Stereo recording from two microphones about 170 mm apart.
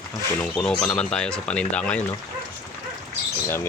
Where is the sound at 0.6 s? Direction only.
5° left (ahead or behind).